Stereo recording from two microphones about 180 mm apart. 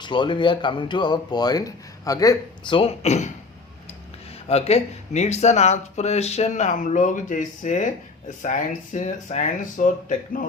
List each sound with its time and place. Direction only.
0.0 s speech: 25° left (ahead or behind)
4.4 s speech: 35° left (ahead or behind)